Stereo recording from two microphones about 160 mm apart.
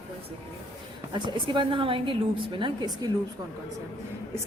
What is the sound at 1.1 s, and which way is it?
A woman's voice, 30° right (ahead or behind).